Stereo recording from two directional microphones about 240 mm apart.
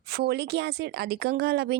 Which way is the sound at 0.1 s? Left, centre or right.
Right.